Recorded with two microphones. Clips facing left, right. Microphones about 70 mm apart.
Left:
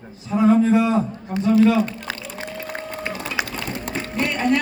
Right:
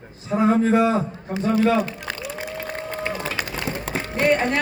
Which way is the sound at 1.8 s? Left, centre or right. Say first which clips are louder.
Left 2 dB; centre.